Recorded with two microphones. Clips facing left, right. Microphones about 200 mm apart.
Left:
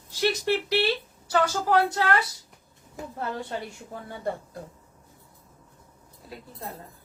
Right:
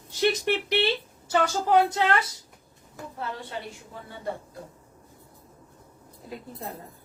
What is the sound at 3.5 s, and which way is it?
Speech, 45° left (ahead or behind).